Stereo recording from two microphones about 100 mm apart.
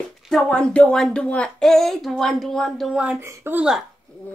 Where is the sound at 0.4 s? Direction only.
10° left (ahead or behind); by 3.2 s 5° right (ahead or behind).